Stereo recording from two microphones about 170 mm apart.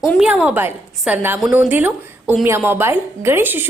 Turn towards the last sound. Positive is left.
turn(degrees=-10)  # may be behind; listen again after turning